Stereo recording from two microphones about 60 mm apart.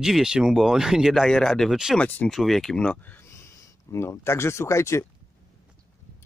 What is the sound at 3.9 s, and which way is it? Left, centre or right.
Speech, left.